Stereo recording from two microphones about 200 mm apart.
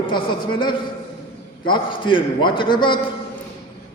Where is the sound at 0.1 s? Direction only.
25° left (ahead or behind).